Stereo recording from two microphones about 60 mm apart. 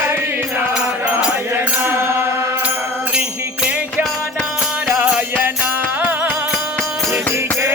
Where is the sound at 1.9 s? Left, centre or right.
Right.